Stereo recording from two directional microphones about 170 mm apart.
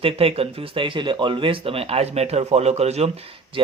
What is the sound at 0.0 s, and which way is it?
Speech, 35° right (ahead or behind).